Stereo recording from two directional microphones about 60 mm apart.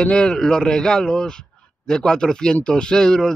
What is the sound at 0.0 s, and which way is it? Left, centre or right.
A man's voice, centre.